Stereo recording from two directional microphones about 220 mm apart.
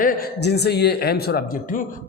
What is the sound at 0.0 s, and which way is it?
A man's voice, 40° left (ahead or behind).